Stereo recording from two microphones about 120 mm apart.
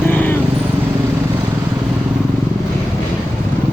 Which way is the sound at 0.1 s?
15° left (ahead or behind).